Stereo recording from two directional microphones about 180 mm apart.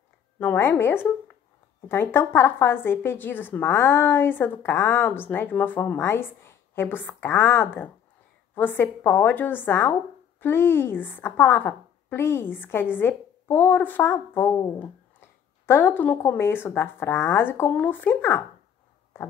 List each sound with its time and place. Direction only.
0.4 s a woman's voice: 10° left (ahead or behind)